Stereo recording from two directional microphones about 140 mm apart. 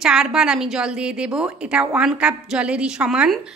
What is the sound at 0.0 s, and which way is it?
A woman's voice, 5° right (ahead or behind).